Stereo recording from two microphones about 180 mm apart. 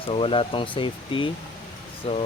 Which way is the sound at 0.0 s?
30° left (ahead or behind).